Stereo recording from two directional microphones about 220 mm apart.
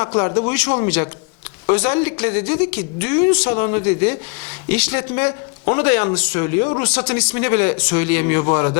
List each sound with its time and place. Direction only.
0.0 s a man's voice: 25° left (ahead or behind)
1.6 s speech: 15° left (ahead or behind)